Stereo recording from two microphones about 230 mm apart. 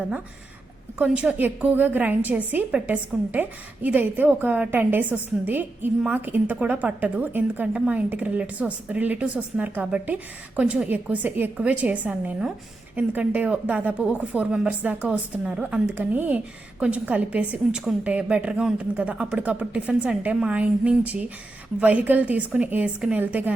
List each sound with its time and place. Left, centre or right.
0.9 s a woman's voice: centre